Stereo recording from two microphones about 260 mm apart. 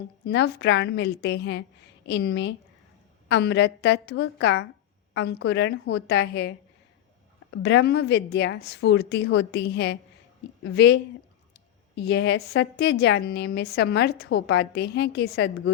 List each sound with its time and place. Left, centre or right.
0.3 s a woman's voice: left
7.5 s a woman's voice: left